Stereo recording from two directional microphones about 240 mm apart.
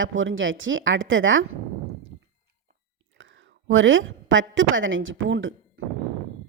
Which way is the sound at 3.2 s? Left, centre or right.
Right.